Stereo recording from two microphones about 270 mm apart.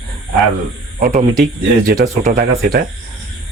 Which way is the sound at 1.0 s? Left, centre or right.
Right.